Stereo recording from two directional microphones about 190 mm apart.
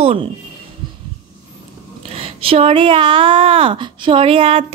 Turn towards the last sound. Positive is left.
turn(degrees=-30)  # may be behind; listen again after turning